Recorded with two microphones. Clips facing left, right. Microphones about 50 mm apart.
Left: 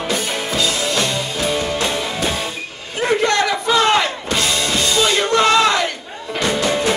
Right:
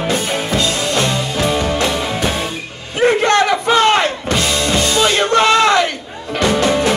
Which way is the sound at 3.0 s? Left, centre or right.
Right.